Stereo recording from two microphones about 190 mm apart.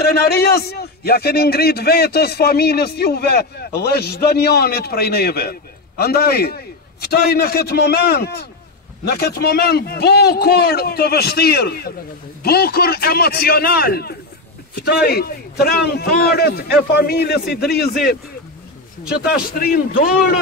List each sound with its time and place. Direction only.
0.0 s a man's voice: 55° left (ahead or behind)
19.0 s a man's voice: 55° left (ahead or behind)